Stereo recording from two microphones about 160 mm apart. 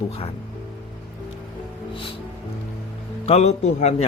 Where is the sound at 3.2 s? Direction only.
40° left (ahead or behind).